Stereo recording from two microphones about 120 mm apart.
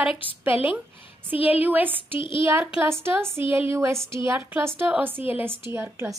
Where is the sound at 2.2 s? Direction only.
45° left (ahead or behind).